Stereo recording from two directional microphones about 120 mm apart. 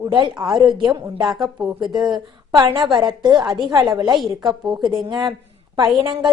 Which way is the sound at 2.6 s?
35° right (ahead or behind).